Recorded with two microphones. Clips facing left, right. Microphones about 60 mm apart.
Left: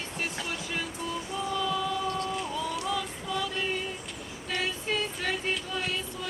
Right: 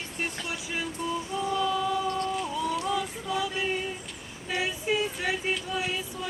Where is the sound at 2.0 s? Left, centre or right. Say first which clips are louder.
Right 2 dB; right.